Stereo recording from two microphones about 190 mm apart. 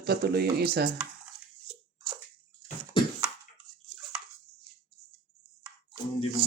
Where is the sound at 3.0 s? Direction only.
25° left (ahead or behind).